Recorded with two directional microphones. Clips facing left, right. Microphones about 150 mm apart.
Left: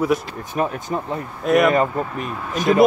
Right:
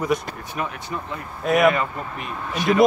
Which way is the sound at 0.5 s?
35° left (ahead or behind).